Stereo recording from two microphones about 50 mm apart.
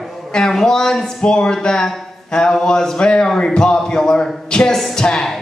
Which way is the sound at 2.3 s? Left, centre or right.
Centre.